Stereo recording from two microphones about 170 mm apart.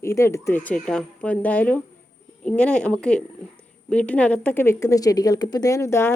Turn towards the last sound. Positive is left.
turn(degrees=15)  # may be behind; listen again after turning